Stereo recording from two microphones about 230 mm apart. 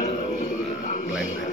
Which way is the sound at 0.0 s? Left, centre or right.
Left.